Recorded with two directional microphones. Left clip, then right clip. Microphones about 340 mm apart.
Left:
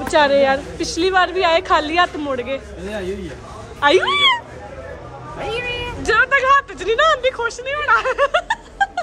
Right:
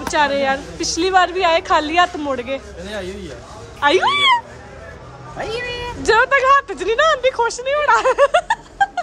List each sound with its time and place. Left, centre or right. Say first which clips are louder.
0.1 s speech: left 3 dB; centre
3.8 s speech: even; centre
5.5 s meow: left 2 dB; right
6.0 s speech: right 1 dB; centre